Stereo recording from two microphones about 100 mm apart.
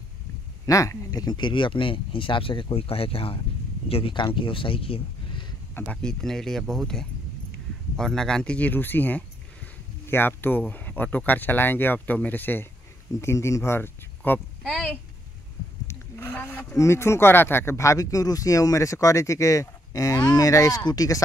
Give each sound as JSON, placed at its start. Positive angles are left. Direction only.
{"t": 0.7, "sound": "speech", "side_deg": 35}
{"t": 3.9, "sound": "speech", "side_deg": 60}
{"t": 5.9, "sound": "a woman's voice", "side_deg": 5}